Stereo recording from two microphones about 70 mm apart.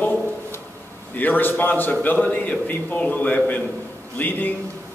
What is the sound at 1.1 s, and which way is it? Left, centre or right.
A man's voice, left.